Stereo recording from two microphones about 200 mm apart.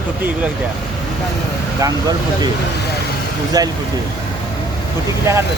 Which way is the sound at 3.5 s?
20° right (ahead or behind).